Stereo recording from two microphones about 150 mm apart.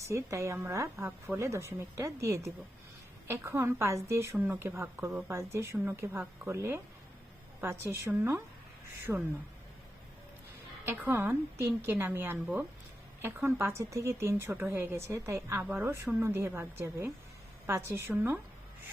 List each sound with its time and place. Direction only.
0.0 s a woman's voice: 20° right (ahead or behind)
9.1 s speech: centre (ahead or behind)
10.8 s a woman's voice: 15° right (ahead or behind)